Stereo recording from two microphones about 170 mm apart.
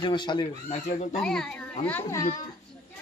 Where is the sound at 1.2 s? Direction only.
5° left (ahead or behind).